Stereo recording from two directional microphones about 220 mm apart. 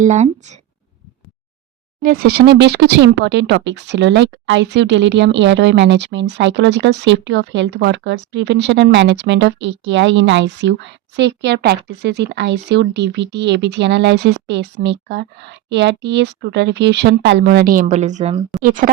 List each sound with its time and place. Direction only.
0.0 s speech: 35° right (ahead or behind)
2.0 s speech: 40° right (ahead or behind)